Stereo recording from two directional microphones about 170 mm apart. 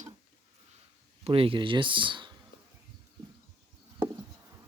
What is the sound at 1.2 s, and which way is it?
Speech, 35° right (ahead or behind).